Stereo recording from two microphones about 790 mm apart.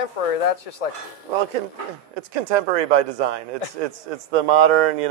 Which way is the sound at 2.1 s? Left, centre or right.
Right.